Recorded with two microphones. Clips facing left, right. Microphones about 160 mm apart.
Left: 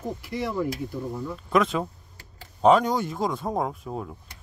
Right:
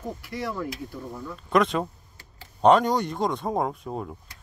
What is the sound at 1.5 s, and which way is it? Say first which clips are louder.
Speech: right 1 dB; centre (ahead or behind).